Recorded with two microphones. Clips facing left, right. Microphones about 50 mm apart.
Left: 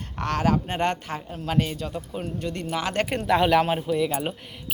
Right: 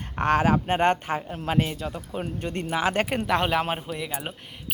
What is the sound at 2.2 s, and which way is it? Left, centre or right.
Speech, right.